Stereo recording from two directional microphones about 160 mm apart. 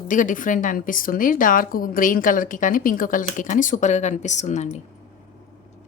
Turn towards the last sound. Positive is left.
turn(degrees=45)  # may be behind; listen again after turning